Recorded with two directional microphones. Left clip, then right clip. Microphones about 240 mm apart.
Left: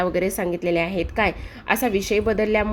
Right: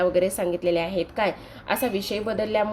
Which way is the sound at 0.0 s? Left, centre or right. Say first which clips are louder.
Right 1 dB; left.